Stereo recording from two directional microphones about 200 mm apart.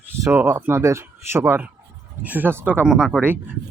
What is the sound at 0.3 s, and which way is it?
Speech, 10° right (ahead or behind).